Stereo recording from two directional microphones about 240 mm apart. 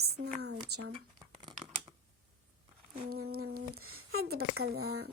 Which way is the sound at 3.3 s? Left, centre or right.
Right.